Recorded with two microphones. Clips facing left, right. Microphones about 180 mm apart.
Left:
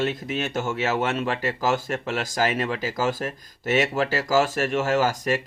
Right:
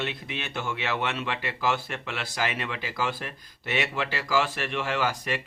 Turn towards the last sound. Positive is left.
turn(degrees=45)  # may be behind; listen again after turning